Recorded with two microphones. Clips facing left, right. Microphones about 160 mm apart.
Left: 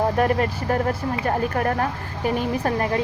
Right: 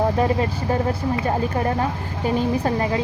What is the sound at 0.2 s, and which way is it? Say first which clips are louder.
Speech: even; 25° right (ahead or behind).